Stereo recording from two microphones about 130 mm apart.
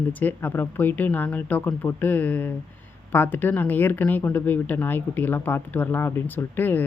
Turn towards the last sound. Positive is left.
turn(degrees=15)  # may be behind; listen again after turning